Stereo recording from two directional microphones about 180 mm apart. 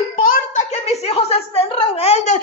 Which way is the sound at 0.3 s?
40° left (ahead or behind).